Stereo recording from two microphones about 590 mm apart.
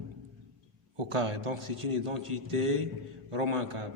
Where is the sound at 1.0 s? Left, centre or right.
Right.